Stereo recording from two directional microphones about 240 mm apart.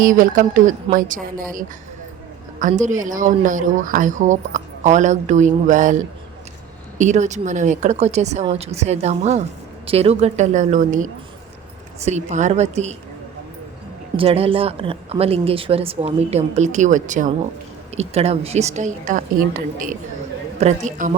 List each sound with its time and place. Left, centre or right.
0.0 s speech: right
7.0 s a woman's voice: right
14.2 s a woman's voice: right